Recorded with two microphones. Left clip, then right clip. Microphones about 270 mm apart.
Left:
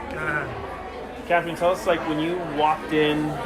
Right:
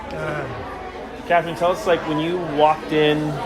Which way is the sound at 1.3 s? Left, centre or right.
Right.